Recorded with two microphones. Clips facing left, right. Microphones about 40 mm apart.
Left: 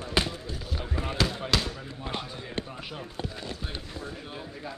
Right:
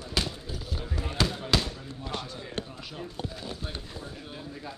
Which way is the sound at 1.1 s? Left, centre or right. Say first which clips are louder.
Even; centre.